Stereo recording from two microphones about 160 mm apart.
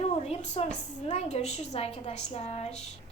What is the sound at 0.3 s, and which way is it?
A woman's voice, 40° left (ahead or behind).